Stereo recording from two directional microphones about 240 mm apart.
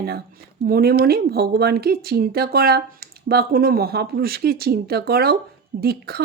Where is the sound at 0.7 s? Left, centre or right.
Right.